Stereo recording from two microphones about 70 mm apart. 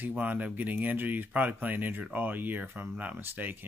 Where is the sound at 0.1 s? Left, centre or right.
Right.